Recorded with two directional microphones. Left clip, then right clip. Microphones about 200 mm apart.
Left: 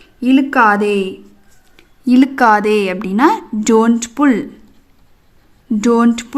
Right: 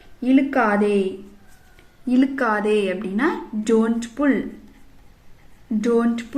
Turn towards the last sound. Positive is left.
turn(degrees=50)  # may be behind; listen again after turning